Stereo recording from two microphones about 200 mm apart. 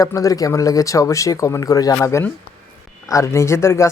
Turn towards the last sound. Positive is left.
turn(degrees=15)  # may be behind; listen again after turning